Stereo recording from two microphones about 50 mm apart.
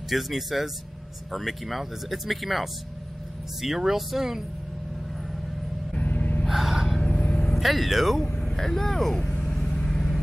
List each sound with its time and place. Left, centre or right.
0.1 s speech: centre
5.9 s gasp: left
6.4 s gasp: centre
7.0 s vehicle: left
7.5 s speech: centre
9.2 s vehicle: left